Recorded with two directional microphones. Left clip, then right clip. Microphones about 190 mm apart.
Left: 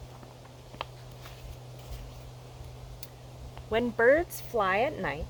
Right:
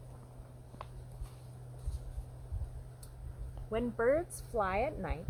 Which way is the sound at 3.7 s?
20° left (ahead or behind).